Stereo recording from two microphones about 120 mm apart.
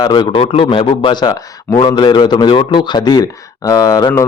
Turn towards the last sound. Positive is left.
turn(degrees=30)  # may be behind; listen again after turning